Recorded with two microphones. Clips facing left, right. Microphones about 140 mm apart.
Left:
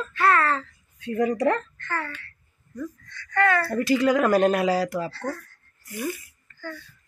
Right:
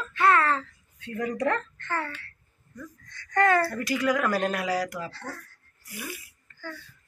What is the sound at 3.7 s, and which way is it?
Speech, 30° left (ahead or behind).